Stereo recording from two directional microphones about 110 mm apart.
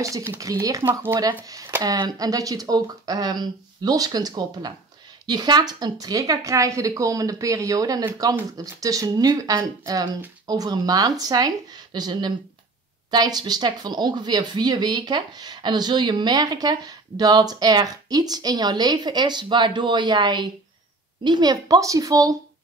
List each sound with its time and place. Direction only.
0.4 s speech: 30° right (ahead or behind)